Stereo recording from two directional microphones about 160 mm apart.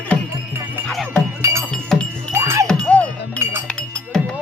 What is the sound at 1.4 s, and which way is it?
Music, 15° right (ahead or behind).